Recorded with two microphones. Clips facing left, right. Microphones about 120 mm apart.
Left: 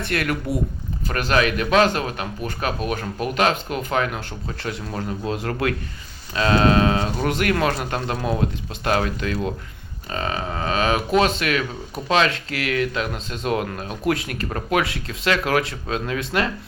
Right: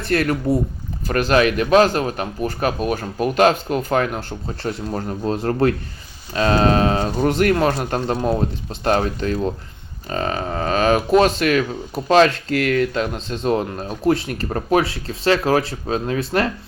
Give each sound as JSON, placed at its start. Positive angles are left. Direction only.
{"t": 0.0, "sound": "a man's voice", "side_deg": -35}